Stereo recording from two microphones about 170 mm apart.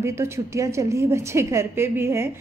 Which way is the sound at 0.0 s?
15° right (ahead or behind).